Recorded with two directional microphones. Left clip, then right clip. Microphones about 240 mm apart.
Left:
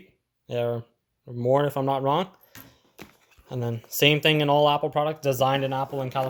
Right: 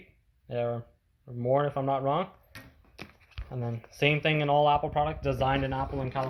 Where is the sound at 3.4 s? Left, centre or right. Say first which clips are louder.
Left 6 dB; left.